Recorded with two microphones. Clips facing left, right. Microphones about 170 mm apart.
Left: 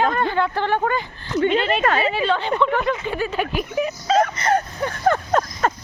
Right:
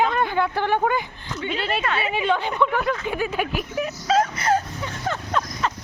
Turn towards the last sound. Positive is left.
turn(degrees=50)  # may be behind; listen again after turning